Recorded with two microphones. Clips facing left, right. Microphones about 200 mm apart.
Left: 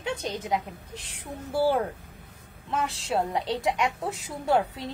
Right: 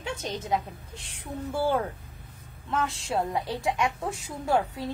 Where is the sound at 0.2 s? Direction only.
15° left (ahead or behind).